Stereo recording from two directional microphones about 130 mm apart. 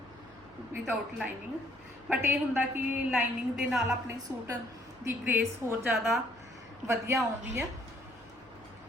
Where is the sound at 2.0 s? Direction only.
15° right (ahead or behind).